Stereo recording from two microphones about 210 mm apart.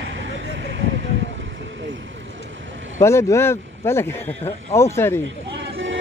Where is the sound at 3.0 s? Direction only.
15° left (ahead or behind).